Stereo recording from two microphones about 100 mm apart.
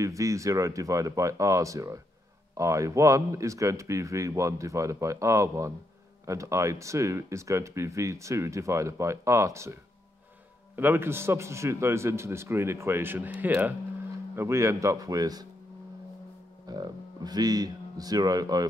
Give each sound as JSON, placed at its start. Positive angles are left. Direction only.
{"t": 0.0, "sound": "a man's voice", "side_deg": -35}
{"t": 10.8, "sound": "a man's voice", "side_deg": -20}
{"t": 16.6, "sound": "speech", "side_deg": -40}